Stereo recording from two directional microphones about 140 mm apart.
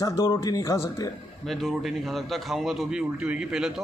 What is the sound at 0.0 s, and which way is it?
Speech, 20° left (ahead or behind).